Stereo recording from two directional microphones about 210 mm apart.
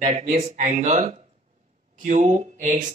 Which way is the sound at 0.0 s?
30° right (ahead or behind).